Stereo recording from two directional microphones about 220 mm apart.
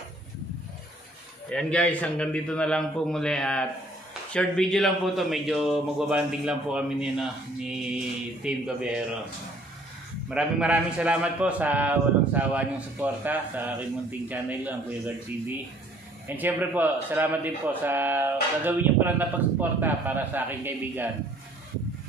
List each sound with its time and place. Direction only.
1.5 s a man's voice: 5° left (ahead or behind)
10.3 s a man's voice: 5° right (ahead or behind)